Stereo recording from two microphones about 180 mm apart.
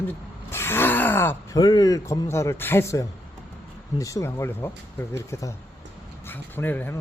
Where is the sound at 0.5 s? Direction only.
15° left (ahead or behind).